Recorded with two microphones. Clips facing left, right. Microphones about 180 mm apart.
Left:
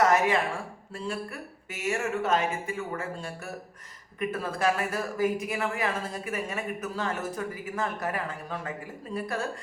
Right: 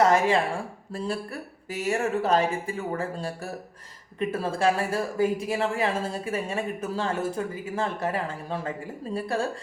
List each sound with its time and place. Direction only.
0.0 s speech: 30° right (ahead or behind)